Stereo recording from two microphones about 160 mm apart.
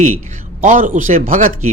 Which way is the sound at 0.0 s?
50° right (ahead or behind).